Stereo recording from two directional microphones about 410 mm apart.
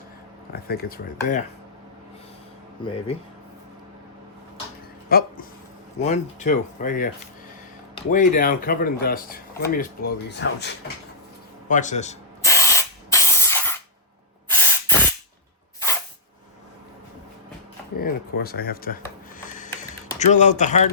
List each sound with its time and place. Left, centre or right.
0.5 s speech: left
2.8 s speech: centre
5.0 s speech: left
11.7 s spray: centre
17.9 s speech: left
19.4 s a sound: centre